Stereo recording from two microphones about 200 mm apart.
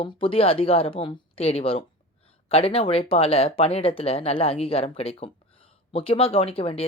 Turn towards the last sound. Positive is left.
turn(degrees=30)  # may be behind; listen again after turning